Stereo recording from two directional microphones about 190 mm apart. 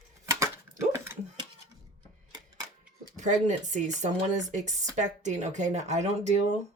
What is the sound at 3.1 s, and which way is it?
Speech, 40° right (ahead or behind).